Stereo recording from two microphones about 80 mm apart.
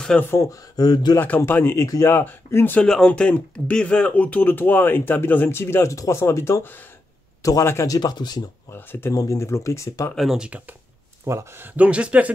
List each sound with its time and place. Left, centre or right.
0.4 s speech: left
1.4 s speech: left
2.8 s speech: centre; by 7.9 s left
7.9 s speech: left
8.6 s speech: left
9.1 s speech: left
10.1 s speech: centre
11.2 s speech: right
11.6 s speech: centre